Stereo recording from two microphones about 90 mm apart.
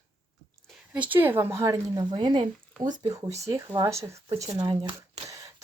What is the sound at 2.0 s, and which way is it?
Speech, 65° right (ahead or behind).